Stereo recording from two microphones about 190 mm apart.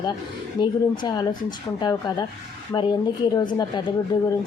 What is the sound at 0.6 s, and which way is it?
A woman's voice, 20° left (ahead or behind).